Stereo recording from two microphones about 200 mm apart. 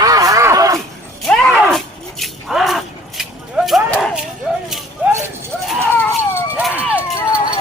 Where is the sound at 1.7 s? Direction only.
Centre (ahead or behind).